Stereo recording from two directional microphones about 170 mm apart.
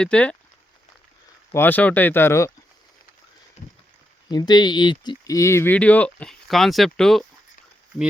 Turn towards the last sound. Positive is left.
turn(degrees=0)  # may be behind; listen again after turning